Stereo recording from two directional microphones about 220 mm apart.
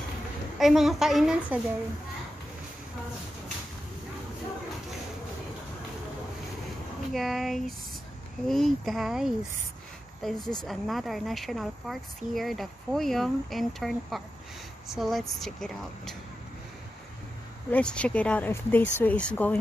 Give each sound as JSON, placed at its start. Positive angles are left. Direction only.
{"t": 0.6, "sound": "speech", "side_deg": 0}
{"t": 7.1, "sound": "speech", "side_deg": 0}
{"t": 17.6, "sound": "speech", "side_deg": 5}